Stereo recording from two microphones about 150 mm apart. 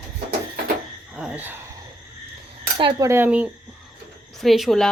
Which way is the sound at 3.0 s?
15° right (ahead or behind).